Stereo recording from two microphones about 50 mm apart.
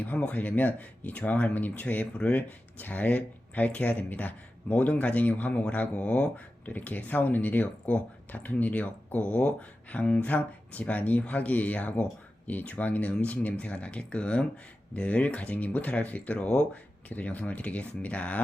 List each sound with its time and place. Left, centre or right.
0.0 s speech: left
2.1 s speech: left
2.7 s speech: left